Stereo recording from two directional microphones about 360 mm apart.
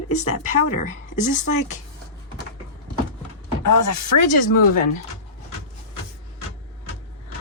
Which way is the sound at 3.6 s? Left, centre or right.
Left.